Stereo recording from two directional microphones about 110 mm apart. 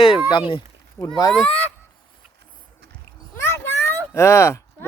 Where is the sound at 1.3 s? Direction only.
10° left (ahead or behind).